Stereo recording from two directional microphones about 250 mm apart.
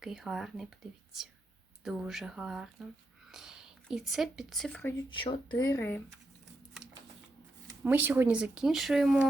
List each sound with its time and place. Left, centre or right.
0.0 s speech: centre
1.8 s speech: centre
5.0 s speech: centre
7.7 s speech: centre